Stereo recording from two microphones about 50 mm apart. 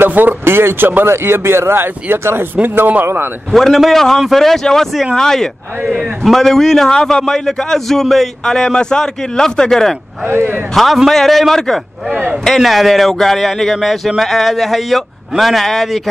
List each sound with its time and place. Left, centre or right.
0.0 s speech: right
1.0 s speech: right
3.5 s a man's voice: centre
5.9 s a man's voice: centre
10.2 s speech: right
10.7 s speech: centre